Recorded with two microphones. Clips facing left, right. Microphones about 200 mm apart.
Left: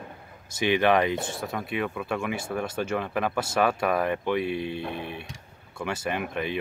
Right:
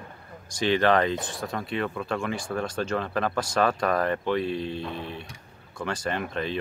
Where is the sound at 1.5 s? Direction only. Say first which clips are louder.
Right 2 dB; 5° left (ahead or behind).